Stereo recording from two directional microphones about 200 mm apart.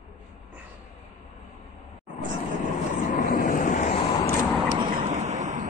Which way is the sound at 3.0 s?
40° left (ahead or behind).